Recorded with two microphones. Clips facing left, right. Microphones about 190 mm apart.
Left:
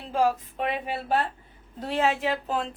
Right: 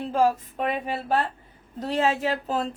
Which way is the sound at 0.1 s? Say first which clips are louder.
Right 1 dB; 40° right (ahead or behind).